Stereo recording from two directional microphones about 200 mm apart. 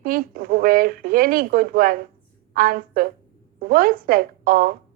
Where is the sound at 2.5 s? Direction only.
45° right (ahead or behind).